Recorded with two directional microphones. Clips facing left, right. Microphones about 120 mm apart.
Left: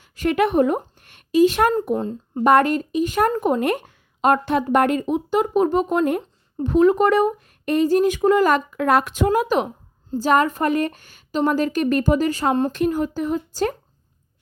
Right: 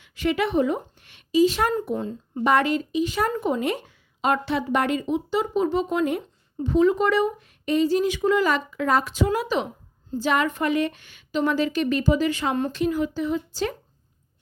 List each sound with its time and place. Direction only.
0.0 s speech: 45° left (ahead or behind)
2.0 s a woman's voice: 35° left (ahead or behind)